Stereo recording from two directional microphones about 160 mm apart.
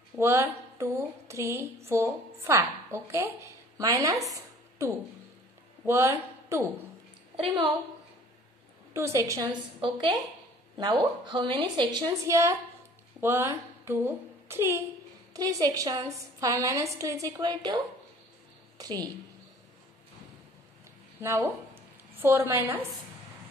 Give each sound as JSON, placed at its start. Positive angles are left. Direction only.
{"t": 0.2, "sound": "a woman's voice", "side_deg": -15}
{"t": 7.3, "sound": "a woman's voice", "side_deg": -30}
{"t": 8.9, "sound": "a woman's voice", "side_deg": -15}
{"t": 21.2, "sound": "a woman's voice", "side_deg": -15}